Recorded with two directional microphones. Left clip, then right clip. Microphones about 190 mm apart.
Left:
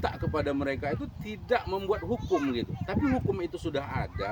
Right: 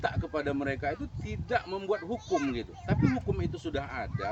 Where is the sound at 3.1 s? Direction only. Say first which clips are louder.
Left 3 dB; 5° left (ahead or behind).